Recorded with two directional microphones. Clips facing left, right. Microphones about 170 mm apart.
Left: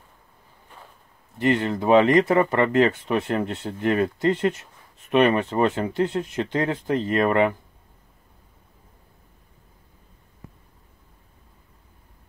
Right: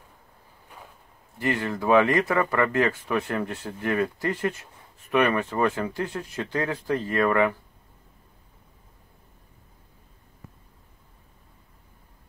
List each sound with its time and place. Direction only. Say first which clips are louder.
1.4 s speech: left 5 dB; 20° left (ahead or behind)